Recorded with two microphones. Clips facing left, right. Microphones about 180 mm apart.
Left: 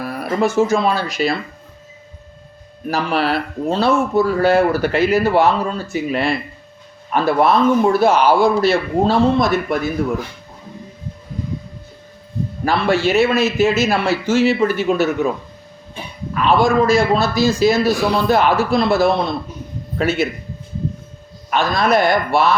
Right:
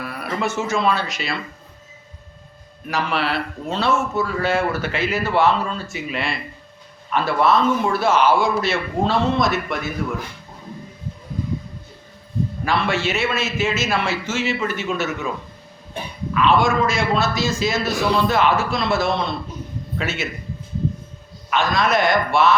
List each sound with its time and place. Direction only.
0.0 s speech: 40° left (ahead or behind)
2.8 s speech: 40° left (ahead or behind)
12.6 s speech: 40° left (ahead or behind)
16.3 s speech: 40° left (ahead or behind)
21.5 s speech: 35° left (ahead or behind)